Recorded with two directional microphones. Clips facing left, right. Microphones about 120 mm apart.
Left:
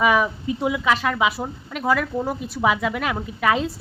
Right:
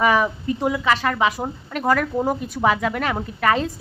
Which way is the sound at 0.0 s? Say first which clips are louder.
Right 1 dB; 5° left (ahead or behind).